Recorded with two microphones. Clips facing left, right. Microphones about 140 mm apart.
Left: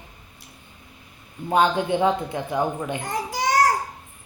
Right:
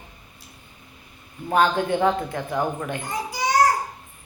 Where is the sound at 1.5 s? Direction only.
15° left (ahead or behind).